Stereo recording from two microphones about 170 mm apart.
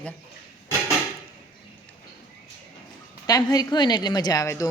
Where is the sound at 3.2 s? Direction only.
20° left (ahead or behind).